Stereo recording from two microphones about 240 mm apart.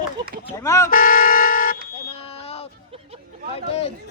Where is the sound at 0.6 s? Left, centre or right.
Centre.